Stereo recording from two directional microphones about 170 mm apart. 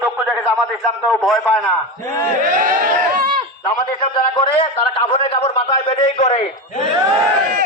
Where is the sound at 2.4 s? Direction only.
50° right (ahead or behind).